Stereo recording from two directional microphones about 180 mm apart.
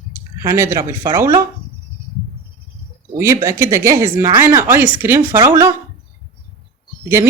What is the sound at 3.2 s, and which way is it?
A woman's voice, 15° right (ahead or behind).